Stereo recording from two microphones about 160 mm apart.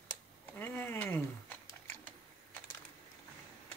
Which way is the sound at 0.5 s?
15° left (ahead or behind).